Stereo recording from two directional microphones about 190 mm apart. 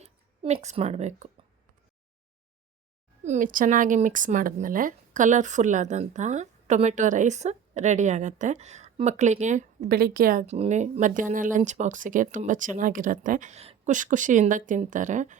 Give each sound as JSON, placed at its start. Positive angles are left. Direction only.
{"t": 0.0, "sound": "a woman's voice", "side_deg": -35}
{"t": 3.2, "sound": "speech", "side_deg": -45}